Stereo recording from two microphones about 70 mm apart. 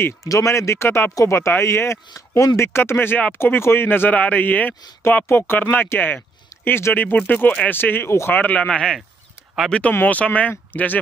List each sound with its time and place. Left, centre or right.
0.0 s speech: left
8.3 s speech: left
8.6 s speech: centre
9.7 s speech: centre